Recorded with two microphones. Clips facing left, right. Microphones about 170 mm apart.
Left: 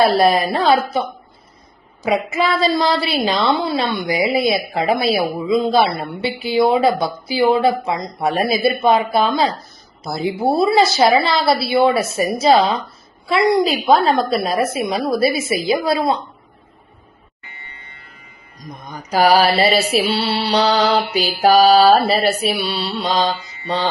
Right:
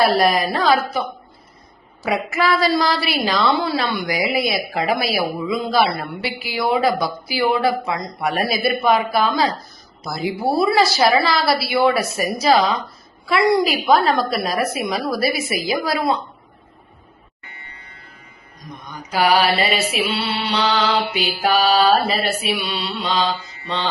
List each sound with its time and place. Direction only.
0.2 s a woman's voice: 30° left (ahead or behind)
2.0 s a woman's voice: 20° left (ahead or behind)
18.9 s mantra: 40° left (ahead or behind)